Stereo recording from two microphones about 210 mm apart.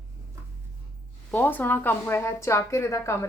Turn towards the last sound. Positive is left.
turn(degrees=15)  # may be behind; listen again after turning